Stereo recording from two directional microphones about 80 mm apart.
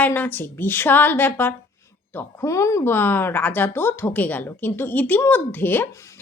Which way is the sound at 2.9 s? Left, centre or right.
Left.